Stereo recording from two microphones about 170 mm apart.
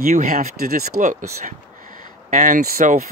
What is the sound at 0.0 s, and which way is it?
Speech, 50° right (ahead or behind).